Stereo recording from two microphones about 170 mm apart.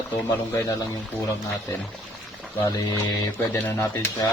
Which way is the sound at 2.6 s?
20° left (ahead or behind).